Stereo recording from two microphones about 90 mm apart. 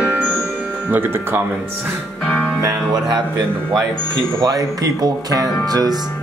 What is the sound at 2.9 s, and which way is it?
Speech, 50° right (ahead or behind).